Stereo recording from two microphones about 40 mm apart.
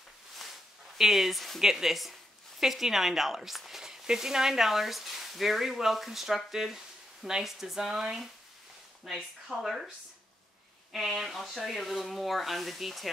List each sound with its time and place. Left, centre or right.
0.9 s speech: centre
1.6 s speech: centre
7.9 s speech: centre
9.1 s speech: centre
10.9 s speech: centre
11.3 s speech: centre